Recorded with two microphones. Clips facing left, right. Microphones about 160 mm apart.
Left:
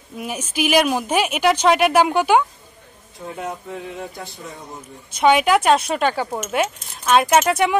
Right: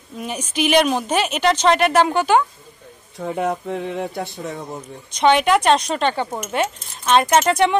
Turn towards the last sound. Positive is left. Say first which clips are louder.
# right 1 dB
turn(degrees=5)  # may be behind; listen again after turning